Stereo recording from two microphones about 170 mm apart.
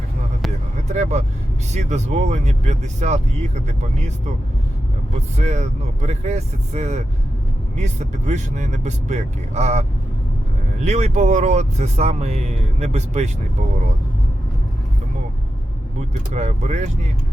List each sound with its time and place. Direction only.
0.9 s speech: 40° right (ahead or behind)
5.4 s speech: 40° right (ahead or behind)
10.8 s speech: 40° right (ahead or behind)
16.0 s speech: 40° right (ahead or behind)